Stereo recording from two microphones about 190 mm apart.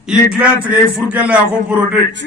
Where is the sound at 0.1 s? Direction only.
5° right (ahead or behind).